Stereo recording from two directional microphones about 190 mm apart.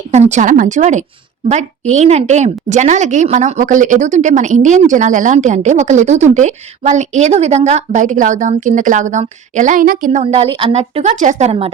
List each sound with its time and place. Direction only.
0.1 s a woman's voice: 35° right (ahead or behind)